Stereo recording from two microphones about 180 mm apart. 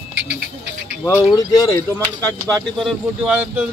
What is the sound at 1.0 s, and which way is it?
Speech, 20° left (ahead or behind).